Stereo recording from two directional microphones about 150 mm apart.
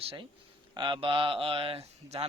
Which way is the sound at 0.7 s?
30° right (ahead or behind).